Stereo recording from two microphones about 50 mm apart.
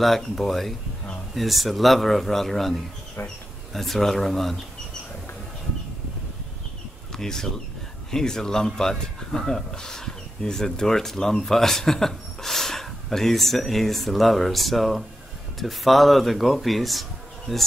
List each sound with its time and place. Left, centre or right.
0.0 s a man's voice: centre
3.2 s speech: left
3.7 s a man's voice: centre
7.2 s a man's voice: centre